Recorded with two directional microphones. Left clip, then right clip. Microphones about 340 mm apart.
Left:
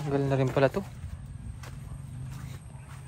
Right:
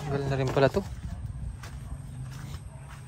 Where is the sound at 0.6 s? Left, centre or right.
Centre.